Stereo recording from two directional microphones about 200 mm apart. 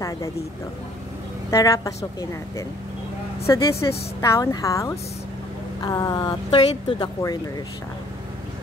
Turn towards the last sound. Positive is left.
turn(degrees=20)  # may be behind; listen again after turning